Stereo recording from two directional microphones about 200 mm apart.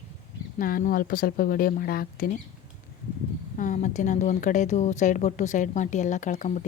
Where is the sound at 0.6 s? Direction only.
45° left (ahead or behind).